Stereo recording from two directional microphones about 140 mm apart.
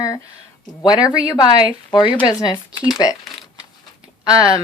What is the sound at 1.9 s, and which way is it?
Speech, 35° left (ahead or behind).